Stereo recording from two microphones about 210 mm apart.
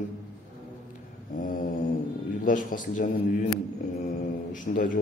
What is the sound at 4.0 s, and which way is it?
Mantra, 40° left (ahead or behind).